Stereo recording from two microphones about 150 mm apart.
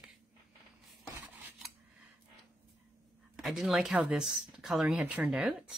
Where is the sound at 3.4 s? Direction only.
Centre (ahead or behind).